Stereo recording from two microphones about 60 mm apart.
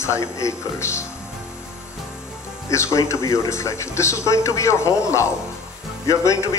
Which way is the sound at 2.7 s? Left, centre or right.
Left.